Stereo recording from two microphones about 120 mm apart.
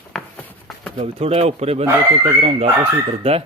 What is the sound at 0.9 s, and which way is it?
Speech, 60° right (ahead or behind).